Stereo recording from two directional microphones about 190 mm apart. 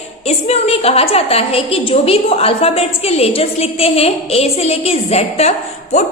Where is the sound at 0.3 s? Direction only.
35° left (ahead or behind).